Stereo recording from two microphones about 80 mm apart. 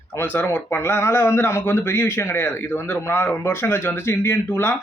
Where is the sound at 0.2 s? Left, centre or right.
Left.